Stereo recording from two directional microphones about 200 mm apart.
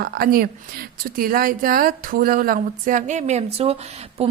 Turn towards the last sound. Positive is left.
turn(degrees=-30)  # may be behind; listen again after turning